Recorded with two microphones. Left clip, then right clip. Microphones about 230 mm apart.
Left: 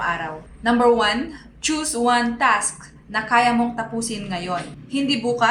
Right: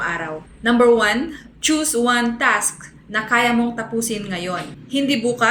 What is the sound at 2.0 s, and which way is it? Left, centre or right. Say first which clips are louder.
Speech: left 1 dB; centre.